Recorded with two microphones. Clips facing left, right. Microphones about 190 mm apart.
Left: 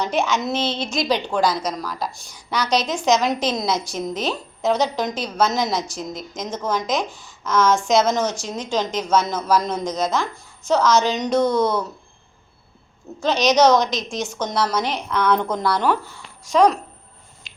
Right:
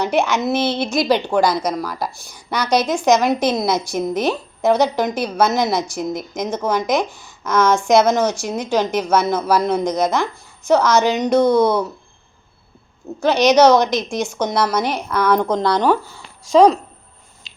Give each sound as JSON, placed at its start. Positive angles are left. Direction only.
{"t": 0.0, "sound": "a woman's voice", "side_deg": -10}
{"t": 13.7, "sound": "a woman's voice", "side_deg": -60}
{"t": 13.9, "sound": "a woman's voice", "side_deg": -10}
{"t": 17.5, "sound": "a sound", "side_deg": -30}